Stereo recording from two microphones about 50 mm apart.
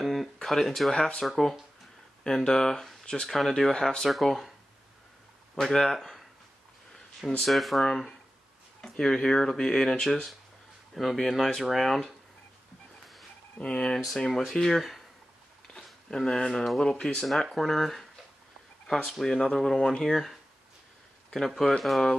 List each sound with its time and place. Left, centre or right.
0.0 s a sound: centre
0.4 s speech: centre
0.9 s speech: centre
1.2 s speech: centre
5.6 s speech: centre
7.4 s speech: centre
13.6 s speech: centre
17.2 s speech: centre
19.0 s speech: centre